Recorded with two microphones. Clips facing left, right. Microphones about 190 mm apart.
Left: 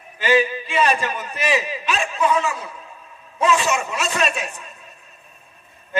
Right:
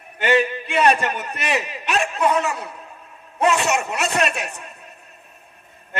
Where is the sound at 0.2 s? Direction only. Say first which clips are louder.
Even; 65° right (ahead or behind).